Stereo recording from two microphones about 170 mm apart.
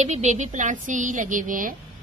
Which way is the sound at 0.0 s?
45° right (ahead or behind).